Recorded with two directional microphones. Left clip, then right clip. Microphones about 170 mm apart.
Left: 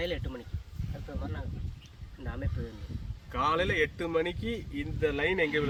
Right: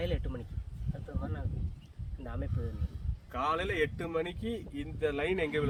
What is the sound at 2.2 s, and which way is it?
Speech, 50° right (ahead or behind).